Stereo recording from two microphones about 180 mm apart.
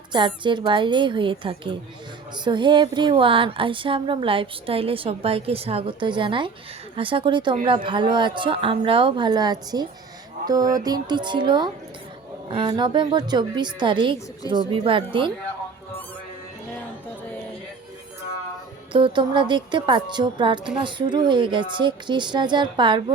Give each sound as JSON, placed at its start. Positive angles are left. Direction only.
{"t": 0.1, "sound": "speech", "side_deg": -25}
{"t": 18.9, "sound": "speech", "side_deg": -30}